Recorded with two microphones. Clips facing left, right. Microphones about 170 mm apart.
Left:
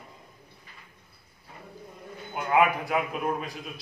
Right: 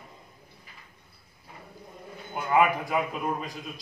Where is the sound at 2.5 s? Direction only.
Centre (ahead or behind).